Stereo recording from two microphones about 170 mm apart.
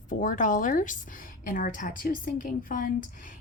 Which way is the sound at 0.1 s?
50° left (ahead or behind).